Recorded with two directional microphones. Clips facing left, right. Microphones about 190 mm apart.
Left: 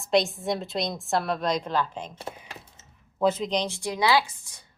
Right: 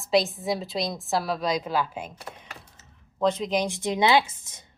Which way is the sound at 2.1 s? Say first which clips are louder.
Left 4 dB; 25° left (ahead or behind).